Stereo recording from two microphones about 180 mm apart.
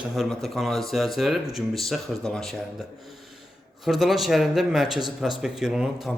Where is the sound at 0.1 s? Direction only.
Centre (ahead or behind).